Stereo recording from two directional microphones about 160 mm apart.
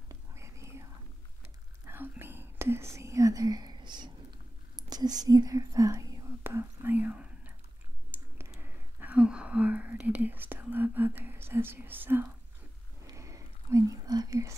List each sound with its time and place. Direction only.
0.1 s whispering: 20° right (ahead or behind)
1.9 s whispering: 15° right (ahead or behind)